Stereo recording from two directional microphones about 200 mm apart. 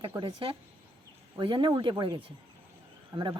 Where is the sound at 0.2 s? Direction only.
25° right (ahead or behind).